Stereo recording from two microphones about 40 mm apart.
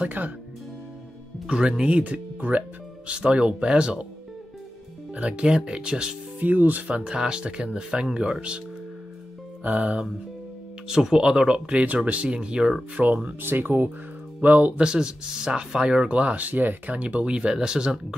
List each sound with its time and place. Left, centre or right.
0.2 s speech: right
1.5 s speech: right
2.0 s speech: right
5.1 s speech: right
6.4 s speech: right
7.1 s speech: right
9.6 s music: right
10.9 s speech: centre
11.8 s speech: right
13.4 s speech: right
14.4 s speech: right
14.8 s speech: right
16.1 s speech: right
17.2 s speech: right